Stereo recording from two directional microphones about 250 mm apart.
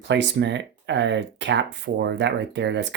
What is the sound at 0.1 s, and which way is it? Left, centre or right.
Speech, right.